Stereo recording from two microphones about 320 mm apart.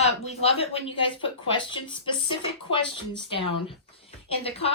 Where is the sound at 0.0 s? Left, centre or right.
Centre.